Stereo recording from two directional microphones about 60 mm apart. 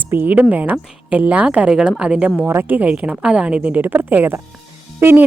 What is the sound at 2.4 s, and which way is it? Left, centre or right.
A woman's voice, right.